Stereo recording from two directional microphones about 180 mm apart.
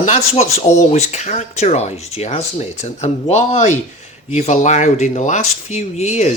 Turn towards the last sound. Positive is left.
turn(degrees=40)  # may be behind; listen again after turning